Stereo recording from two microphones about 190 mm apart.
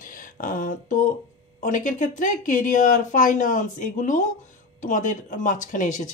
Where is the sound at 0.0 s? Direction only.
45° left (ahead or behind).